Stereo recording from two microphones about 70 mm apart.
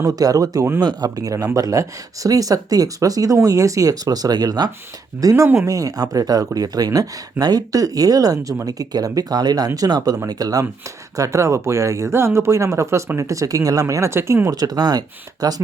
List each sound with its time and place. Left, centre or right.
0.0 s speech: right
0.8 s speech: right
5.2 s speech: right
11.2 s speech: right
14.4 s speech: right